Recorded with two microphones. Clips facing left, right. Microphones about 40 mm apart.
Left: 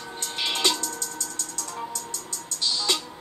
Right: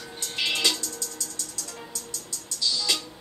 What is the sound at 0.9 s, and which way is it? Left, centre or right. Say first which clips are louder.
Music: left 3 dB; left.